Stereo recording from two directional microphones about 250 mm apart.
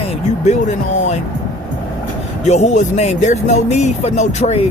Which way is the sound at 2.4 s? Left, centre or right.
Left.